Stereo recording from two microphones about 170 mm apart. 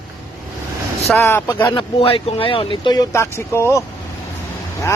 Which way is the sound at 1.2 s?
15° left (ahead or behind).